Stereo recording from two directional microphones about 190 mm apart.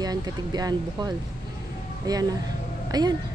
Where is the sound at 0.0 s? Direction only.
20° right (ahead or behind).